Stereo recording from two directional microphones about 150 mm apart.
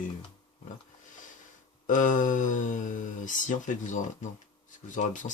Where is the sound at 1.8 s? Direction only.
55° left (ahead or behind).